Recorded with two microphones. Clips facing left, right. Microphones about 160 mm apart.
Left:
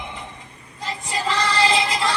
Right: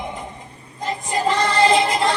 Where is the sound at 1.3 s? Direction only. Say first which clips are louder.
Right 4 dB; 50° right (ahead or behind).